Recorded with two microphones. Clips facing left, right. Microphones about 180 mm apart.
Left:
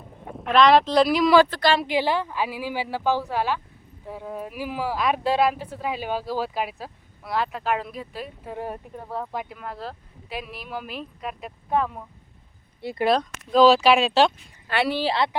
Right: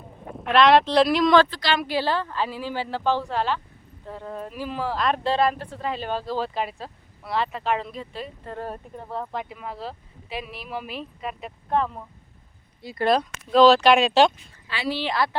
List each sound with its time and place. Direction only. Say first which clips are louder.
0.3 s speech: even; centre (ahead or behind)
1.5 s speech: left 6 dB; 50° left (ahead or behind)
1.9 s speech: left 1 dB; 15° left (ahead or behind)
13.1 s speech: right 1 dB; centre (ahead or behind)
14.7 s speech: left 4 dB; 60° left (ahead or behind)
15.0 s speech: left 2 dB; 25° left (ahead or behind)